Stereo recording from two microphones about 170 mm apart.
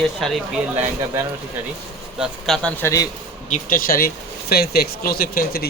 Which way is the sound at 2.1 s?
Centre (ahead or behind).